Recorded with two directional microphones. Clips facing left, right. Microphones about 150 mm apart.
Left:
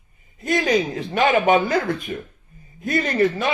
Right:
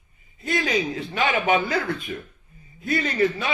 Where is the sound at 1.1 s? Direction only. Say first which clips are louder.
Left 5 dB; 45° left (ahead or behind).